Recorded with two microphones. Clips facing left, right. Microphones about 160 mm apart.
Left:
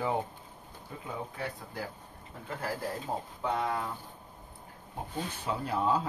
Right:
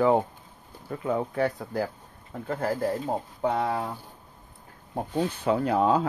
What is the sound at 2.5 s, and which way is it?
Speech, 45° right (ahead or behind).